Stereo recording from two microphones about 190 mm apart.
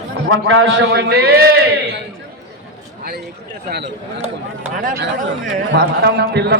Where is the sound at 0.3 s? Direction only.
90° right; by 1.8 s 70° right (ahead or behind).